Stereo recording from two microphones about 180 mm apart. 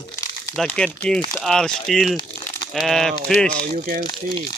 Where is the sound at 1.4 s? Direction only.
5° left (ahead or behind).